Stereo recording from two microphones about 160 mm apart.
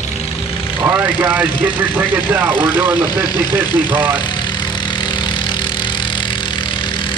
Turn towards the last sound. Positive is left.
turn(degrees=30)  # may be behind; listen again after turning